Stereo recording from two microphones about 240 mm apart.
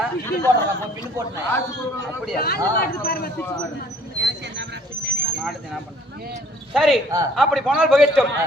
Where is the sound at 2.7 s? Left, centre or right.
Left.